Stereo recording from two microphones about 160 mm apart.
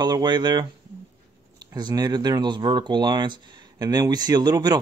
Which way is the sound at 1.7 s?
25° right (ahead or behind).